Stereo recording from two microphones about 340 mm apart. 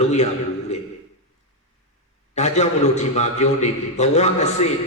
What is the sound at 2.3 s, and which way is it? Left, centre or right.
A man's voice, centre.